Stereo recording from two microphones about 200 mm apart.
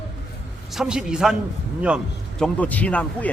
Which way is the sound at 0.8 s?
5° right (ahead or behind).